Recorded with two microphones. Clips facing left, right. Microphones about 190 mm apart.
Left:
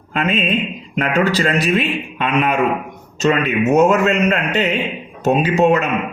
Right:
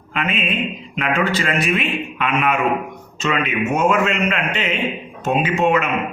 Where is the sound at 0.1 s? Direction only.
40° left (ahead or behind).